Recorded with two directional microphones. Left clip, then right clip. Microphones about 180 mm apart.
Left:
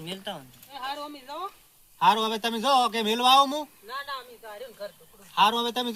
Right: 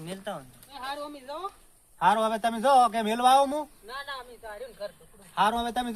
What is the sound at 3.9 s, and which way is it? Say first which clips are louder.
Speech: left 2 dB; 45° left (ahead or behind).